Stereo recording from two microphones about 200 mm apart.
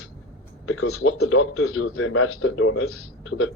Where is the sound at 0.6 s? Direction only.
90° left.